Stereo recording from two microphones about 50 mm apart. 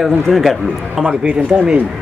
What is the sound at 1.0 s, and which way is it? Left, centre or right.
Speech, centre.